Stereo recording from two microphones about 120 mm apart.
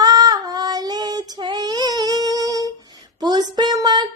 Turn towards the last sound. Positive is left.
turn(degrees=-35)  # may be behind; listen again after turning